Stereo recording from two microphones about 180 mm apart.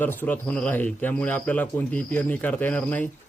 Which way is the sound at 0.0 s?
10° left (ahead or behind).